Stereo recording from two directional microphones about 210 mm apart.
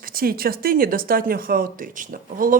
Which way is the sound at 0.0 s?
45° right (ahead or behind).